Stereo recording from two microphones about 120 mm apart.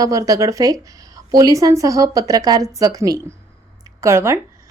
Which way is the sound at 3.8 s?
25° right (ahead or behind).